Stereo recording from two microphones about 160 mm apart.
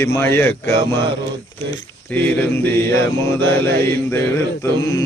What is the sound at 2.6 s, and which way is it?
Mantra, 10° left (ahead or behind).